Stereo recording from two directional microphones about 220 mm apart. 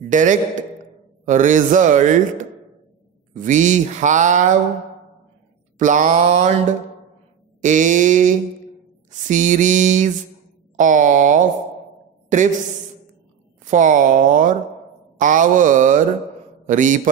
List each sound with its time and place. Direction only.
0.1 s speech: 35° right (ahead or behind)
5.8 s speech: 35° right (ahead or behind)
7.6 s speech: 35° right (ahead or behind)
13.7 s speech: 35° right (ahead or behind)